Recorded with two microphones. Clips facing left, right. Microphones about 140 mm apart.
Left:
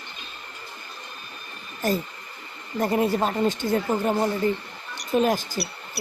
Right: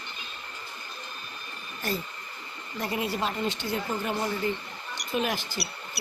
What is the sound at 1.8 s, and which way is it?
A woman's voice, 45° left (ahead or behind).